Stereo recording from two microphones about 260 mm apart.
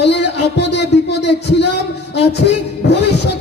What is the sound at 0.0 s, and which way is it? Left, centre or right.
Speech, left.